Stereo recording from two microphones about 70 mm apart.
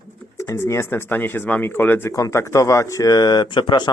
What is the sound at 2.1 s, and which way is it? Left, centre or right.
Speech, left.